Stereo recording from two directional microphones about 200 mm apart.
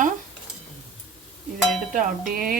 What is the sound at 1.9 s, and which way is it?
Cowbell, 40° right (ahead or behind).